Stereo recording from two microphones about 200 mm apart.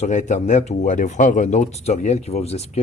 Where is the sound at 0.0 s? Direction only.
35° left (ahead or behind).